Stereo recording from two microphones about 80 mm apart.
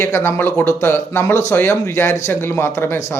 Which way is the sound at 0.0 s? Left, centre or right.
Left.